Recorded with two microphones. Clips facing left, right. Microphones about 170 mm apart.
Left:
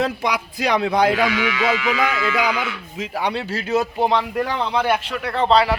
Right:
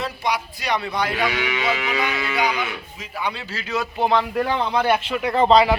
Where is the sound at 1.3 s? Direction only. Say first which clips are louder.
Left 3 dB; 25° right (ahead or behind).